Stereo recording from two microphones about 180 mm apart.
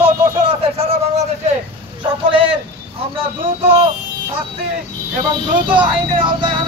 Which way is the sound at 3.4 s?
30° right (ahead or behind).